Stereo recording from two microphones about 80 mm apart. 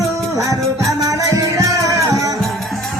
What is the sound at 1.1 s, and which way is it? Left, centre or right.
Music, right.